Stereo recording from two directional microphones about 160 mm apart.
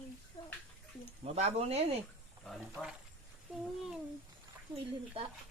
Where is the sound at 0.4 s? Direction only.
30° left (ahead or behind).